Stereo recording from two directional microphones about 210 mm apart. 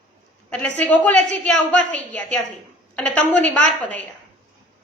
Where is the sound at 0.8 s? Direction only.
5° left (ahead or behind).